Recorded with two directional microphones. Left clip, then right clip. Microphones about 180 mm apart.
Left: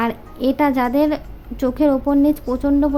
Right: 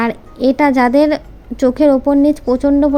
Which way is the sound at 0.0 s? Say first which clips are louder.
Right 5 dB; 25° right (ahead or behind).